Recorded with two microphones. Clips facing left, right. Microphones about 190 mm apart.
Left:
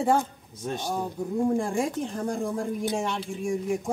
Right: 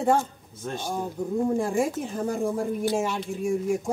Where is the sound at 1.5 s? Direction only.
5° right (ahead or behind).